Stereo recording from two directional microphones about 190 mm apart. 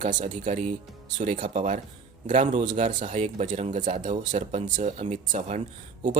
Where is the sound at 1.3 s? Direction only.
45° right (ahead or behind).